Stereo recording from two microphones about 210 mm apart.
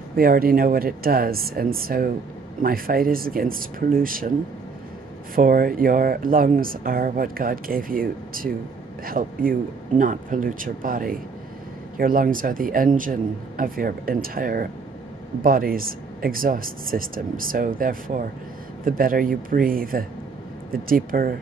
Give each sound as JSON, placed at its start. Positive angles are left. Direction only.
{"t": 0.1, "sound": "speech", "side_deg": -45}
{"t": 5.3, "sound": "speech", "side_deg": -40}